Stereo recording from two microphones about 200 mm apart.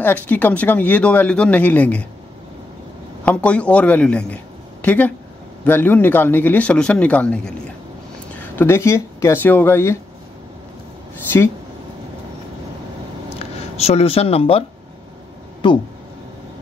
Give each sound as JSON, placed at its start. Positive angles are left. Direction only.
{"t": 0.0, "sound": "speech", "side_deg": 10}
{"t": 3.3, "sound": "a man's voice", "side_deg": 5}
{"t": 8.5, "sound": "speech", "side_deg": 15}
{"t": 13.4, "sound": "speech", "side_deg": 30}